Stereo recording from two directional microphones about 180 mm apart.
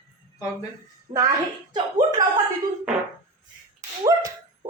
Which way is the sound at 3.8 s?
20° right (ahead or behind).